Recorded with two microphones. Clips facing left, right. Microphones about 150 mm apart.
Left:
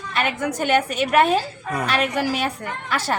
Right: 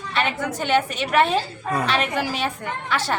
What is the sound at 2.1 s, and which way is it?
A woman's voice, 45° left (ahead or behind).